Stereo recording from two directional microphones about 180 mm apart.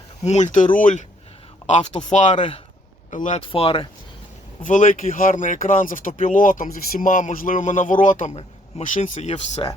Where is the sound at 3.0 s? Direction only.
45° left (ahead or behind).